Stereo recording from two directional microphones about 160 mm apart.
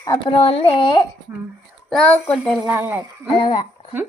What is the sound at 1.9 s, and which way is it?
Speech, 5° left (ahead or behind).